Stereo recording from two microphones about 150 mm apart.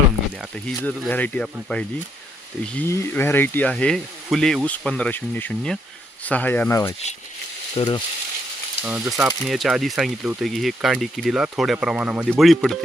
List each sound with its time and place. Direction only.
0.8 s speech: 10° left (ahead or behind)
2.8 s speech: 15° left (ahead or behind)
7.8 s speech: 30° left (ahead or behind)
8.8 s speech: 5° right (ahead or behind)